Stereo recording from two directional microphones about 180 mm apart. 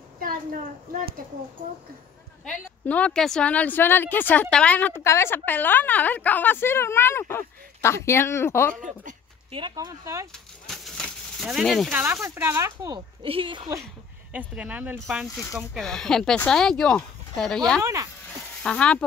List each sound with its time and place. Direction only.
2.4 s a woman's voice: 5° left (ahead or behind)
9.5 s speech: 25° right (ahead or behind)
10.3 s a sound: centre (ahead or behind)
11.9 s speech: 10° right (ahead or behind)
14.5 s speech: 10° right (ahead or behind)